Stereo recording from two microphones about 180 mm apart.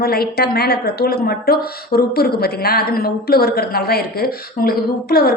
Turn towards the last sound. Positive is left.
turn(degrees=60)  # may be behind; listen again after turning